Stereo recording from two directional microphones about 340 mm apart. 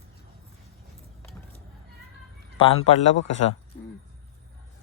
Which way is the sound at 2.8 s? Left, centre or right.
Left.